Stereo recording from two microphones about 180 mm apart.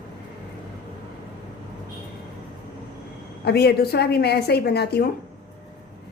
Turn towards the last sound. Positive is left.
turn(degrees=65)  # may be behind; listen again after turning